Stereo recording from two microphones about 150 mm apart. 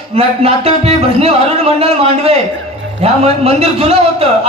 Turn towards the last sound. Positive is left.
turn(degrees=-40)  # may be behind; listen again after turning